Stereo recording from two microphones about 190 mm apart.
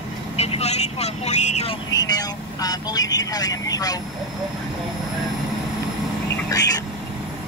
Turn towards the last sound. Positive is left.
turn(degrees=20)  # may be behind; listen again after turning